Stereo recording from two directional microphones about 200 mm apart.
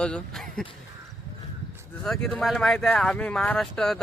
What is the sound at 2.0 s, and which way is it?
Speech, 5° left (ahead or behind).